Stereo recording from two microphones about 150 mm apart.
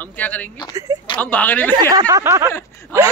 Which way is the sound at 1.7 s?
25° right (ahead or behind).